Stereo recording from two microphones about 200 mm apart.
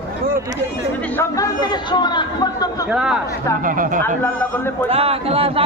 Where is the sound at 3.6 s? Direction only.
40° right (ahead or behind).